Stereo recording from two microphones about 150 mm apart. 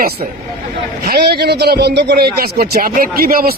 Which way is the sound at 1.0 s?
90° right.